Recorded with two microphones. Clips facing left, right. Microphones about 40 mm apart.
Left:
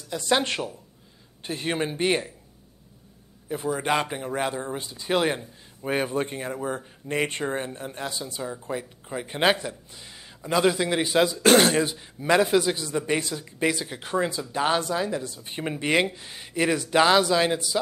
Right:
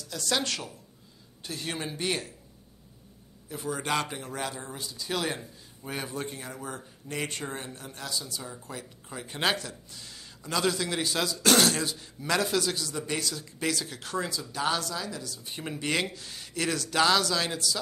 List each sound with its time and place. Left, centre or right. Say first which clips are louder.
0.1 s speech: left 6 dB; left
3.4 s speech: left 6 dB; left